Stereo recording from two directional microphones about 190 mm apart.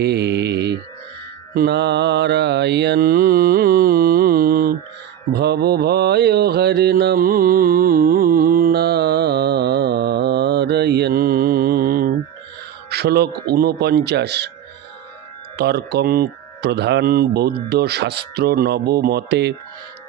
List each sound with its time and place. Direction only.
0.0 s mantra: 60° right (ahead or behind)
12.9 s speech: 55° right (ahead or behind)
15.5 s speech: 60° right (ahead or behind)